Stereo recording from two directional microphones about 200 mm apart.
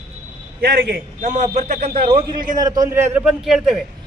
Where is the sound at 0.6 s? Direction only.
50° right (ahead or behind); by 2.0 s 35° right (ahead or behind).